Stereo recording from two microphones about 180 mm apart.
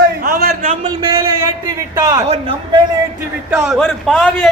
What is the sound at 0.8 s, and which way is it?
A man's voice, 25° right (ahead or behind).